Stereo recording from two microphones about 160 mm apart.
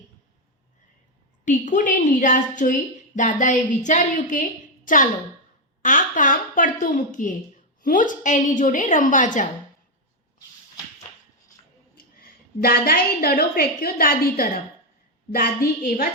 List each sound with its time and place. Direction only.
1.5 s a woman's voice: 50° left (ahead or behind)
11.9 s a woman's voice: 70° left (ahead or behind)